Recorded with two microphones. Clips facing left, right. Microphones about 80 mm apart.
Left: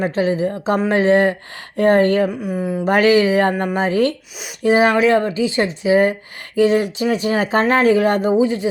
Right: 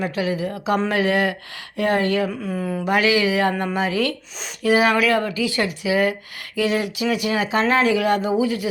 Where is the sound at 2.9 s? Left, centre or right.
Left.